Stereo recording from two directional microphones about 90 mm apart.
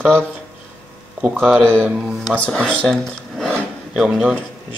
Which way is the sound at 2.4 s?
10° left (ahead or behind).